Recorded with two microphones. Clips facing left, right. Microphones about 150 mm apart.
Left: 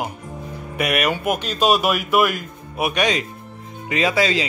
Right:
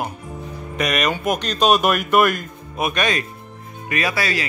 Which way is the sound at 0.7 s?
10° left (ahead or behind).